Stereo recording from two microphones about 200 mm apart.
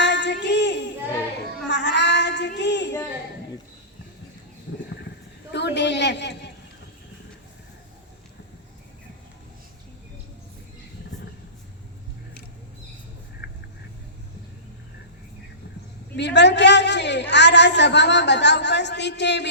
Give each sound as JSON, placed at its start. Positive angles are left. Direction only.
{"t": 0.0, "sound": "child singing", "side_deg": 60}
{"t": 5.5, "sound": "a woman's voice", "side_deg": 60}
{"t": 13.4, "sound": "vehicle", "side_deg": 55}
{"t": 16.1, "sound": "a man's voice", "side_deg": 60}